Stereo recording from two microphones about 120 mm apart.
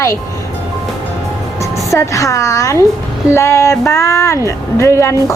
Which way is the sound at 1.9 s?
25° left (ahead or behind).